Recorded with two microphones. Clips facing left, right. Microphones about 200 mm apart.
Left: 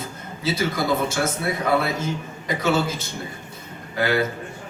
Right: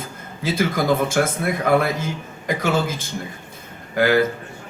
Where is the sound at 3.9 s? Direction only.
50° right (ahead or behind).